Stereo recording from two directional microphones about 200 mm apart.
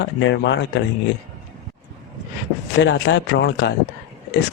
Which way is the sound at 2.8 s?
65° left (ahead or behind).